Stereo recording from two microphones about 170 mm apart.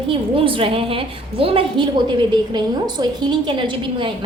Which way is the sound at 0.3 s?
30° right (ahead or behind).